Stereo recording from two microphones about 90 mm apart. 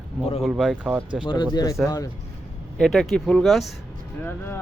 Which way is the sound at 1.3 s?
60° left (ahead or behind).